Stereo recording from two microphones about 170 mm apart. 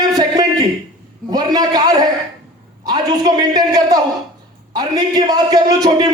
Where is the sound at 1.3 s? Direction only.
25° right (ahead or behind).